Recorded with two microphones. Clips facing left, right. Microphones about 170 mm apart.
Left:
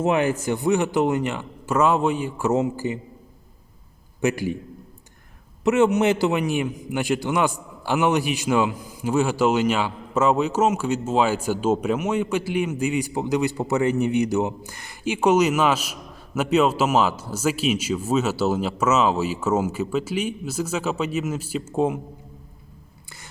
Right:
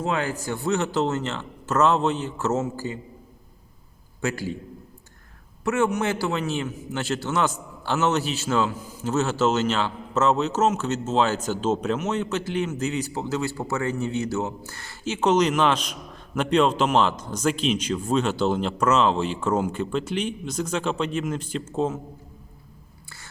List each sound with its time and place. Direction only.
0.0 s a man's voice: 20° left (ahead or behind)
4.2 s a man's voice: 15° left (ahead or behind)
5.6 s a man's voice: 20° left (ahead or behind)